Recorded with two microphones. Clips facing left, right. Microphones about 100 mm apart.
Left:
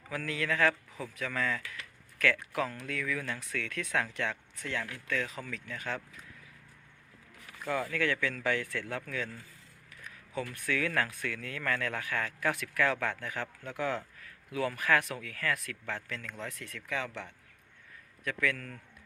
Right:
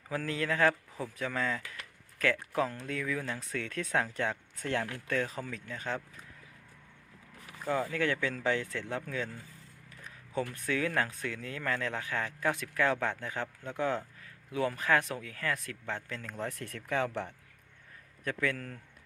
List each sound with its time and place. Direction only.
0.1 s speech: 30° right (ahead or behind)
7.6 s speech: 25° right (ahead or behind)
10.4 s speech: 25° right (ahead or behind)
16.4 s speech: 45° right (ahead or behind)
18.3 s speech: 30° right (ahead or behind)